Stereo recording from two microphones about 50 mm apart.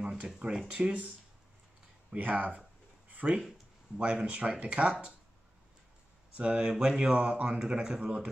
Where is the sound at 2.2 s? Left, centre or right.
Right.